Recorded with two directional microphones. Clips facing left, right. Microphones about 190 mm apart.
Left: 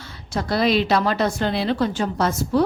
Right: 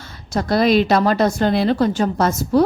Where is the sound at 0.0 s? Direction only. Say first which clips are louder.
Right 4 dB; 45° right (ahead or behind).